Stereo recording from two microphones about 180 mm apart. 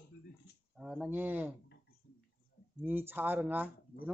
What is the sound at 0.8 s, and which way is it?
Speech, 5° right (ahead or behind).